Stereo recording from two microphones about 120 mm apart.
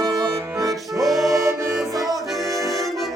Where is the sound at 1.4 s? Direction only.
25° right (ahead or behind).